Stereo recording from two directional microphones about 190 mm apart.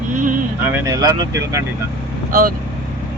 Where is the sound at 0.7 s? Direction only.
15° right (ahead or behind).